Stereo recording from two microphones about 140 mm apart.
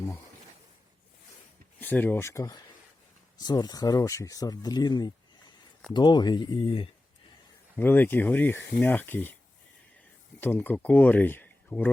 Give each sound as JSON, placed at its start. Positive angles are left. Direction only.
{"t": 1.8, "sound": "speech", "side_deg": 10}
{"t": 7.8, "sound": "speech", "side_deg": 15}
{"t": 10.4, "sound": "speech", "side_deg": 15}